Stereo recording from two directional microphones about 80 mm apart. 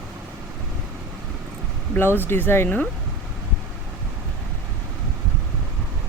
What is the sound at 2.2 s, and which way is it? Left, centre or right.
Speech, left.